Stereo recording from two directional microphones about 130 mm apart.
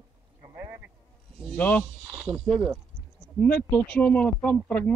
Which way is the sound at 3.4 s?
10° left (ahead or behind).